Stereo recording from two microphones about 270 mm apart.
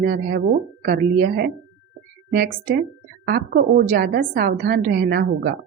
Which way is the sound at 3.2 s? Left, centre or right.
Right.